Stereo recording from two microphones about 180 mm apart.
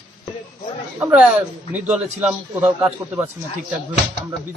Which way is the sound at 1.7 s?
5° right (ahead or behind).